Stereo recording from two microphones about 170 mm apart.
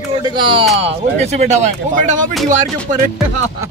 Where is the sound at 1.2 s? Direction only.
40° right (ahead or behind).